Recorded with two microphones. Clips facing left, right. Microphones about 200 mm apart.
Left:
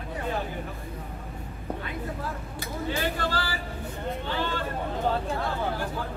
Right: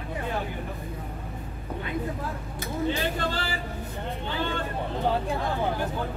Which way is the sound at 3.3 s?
20° right (ahead or behind).